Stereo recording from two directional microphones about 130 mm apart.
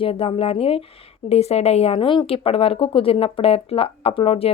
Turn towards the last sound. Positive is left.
turn(degrees=50)  # may be behind; listen again after turning